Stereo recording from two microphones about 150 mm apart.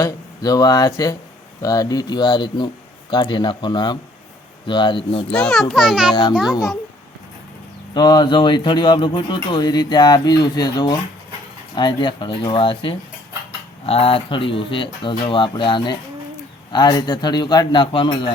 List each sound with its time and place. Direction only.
0.0 s speech: 25° left (ahead or behind)
5.3 s a child's voice: 5° left (ahead or behind)
7.9 s speech: 25° left (ahead or behind)